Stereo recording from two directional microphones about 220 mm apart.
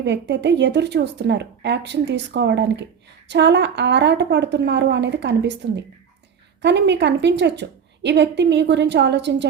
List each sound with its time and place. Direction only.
0.0 s a woman's voice: 50° right (ahead or behind)